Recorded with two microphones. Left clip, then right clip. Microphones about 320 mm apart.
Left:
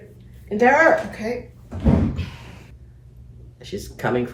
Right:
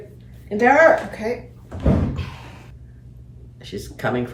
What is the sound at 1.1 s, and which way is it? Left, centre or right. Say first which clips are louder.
Speech: right 2 dB; centre.